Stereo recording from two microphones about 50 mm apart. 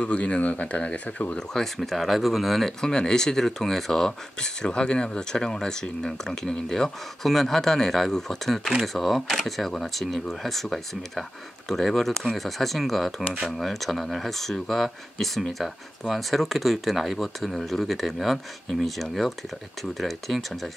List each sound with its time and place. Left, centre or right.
0.0 s speech: left
1.5 s speech: centre
2.8 s speech: centre